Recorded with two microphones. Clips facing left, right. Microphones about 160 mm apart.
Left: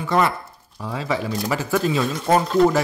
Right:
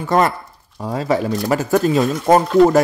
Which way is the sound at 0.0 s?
45° right (ahead or behind).